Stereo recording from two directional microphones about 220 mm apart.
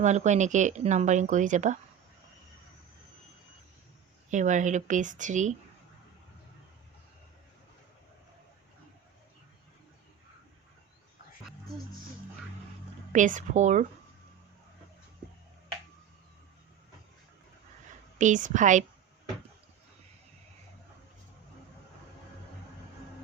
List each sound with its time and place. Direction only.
0.0 s speech: 30° right (ahead or behind)
4.3 s speech: 35° right (ahead or behind)
13.1 s speech: 35° right (ahead or behind)
18.2 s speech: 35° right (ahead or behind)